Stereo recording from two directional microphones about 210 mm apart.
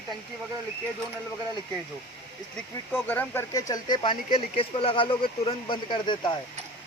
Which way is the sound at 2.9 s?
10° left (ahead or behind).